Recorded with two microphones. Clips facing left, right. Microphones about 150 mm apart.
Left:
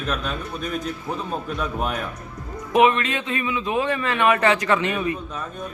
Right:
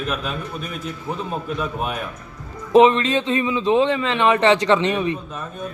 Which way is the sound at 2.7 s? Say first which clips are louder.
Right 5 dB; 30° right (ahead or behind).